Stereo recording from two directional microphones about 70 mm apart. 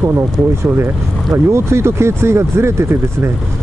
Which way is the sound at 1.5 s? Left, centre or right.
Right.